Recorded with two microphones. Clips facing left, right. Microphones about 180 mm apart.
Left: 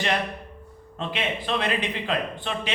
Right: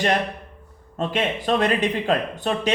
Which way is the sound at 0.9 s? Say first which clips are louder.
Right 5 dB; 45° right (ahead or behind).